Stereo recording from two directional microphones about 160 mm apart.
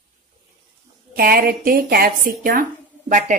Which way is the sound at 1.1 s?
70° right (ahead or behind).